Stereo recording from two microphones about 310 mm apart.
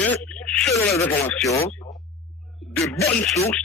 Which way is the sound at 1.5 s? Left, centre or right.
Centre.